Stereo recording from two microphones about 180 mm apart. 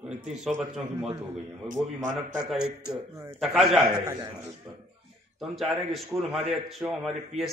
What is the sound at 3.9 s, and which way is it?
Speech, 20° right (ahead or behind).